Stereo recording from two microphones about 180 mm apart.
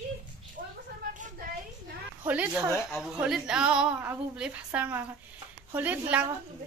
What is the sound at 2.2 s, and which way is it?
A woman's voice, 5° right (ahead or behind).